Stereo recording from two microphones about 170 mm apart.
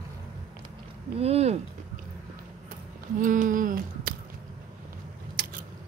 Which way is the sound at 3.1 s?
50° right (ahead or behind).